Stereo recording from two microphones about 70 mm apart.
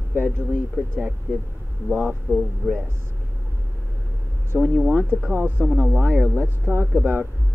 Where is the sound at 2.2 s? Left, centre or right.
Centre.